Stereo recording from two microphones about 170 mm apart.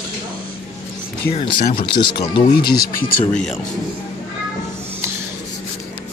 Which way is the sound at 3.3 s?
5° left (ahead or behind).